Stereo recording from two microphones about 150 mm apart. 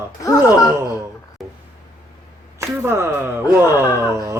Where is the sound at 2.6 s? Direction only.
15° right (ahead or behind).